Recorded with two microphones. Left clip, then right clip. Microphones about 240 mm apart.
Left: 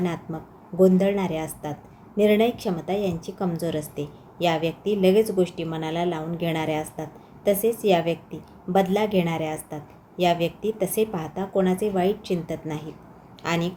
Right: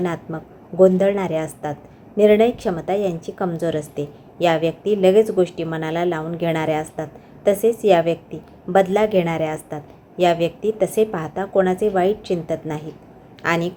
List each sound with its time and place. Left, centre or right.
0.0 s a woman's voice: centre